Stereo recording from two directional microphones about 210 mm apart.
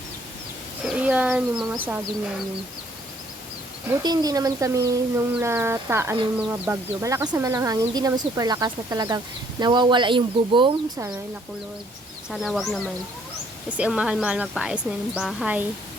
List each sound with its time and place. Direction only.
0.9 s speech: 5° right (ahead or behind)
4.0 s speech: 20° right (ahead or behind)
12.3 s a woman's voice: centre (ahead or behind)